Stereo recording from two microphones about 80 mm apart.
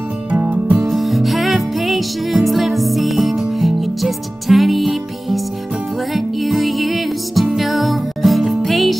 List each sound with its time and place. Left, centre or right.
0.3 s music: centre
0.8 s music: centre